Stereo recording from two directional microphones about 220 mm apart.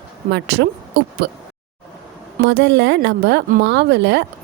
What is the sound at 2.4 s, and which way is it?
A woman's voice, 50° right (ahead or behind).